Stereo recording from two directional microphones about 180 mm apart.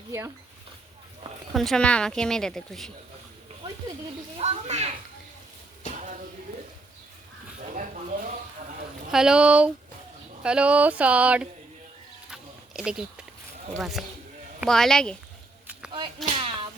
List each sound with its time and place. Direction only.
1.5 s a woman's voice: centre (ahead or behind)
4.4 s speech: 40° right (ahead or behind)
9.1 s a woman's voice: 5° right (ahead or behind)
12.3 s a sound: 5° right (ahead or behind)
13.7 s a woman's voice: centre (ahead or behind)
15.9 s a sound: 30° right (ahead or behind)